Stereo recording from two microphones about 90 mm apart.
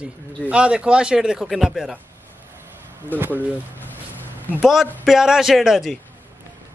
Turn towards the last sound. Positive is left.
turn(degrees=0)  # may be behind; listen again after turning